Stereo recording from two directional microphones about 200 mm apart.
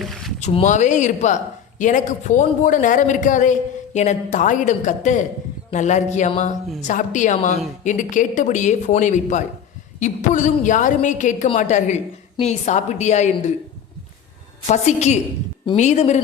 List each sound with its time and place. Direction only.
0.0 s boat: centre (ahead or behind)
0.3 s a woman's voice: 35° left (ahead or behind)
14.7 s a woman's voice: 35° left (ahead or behind)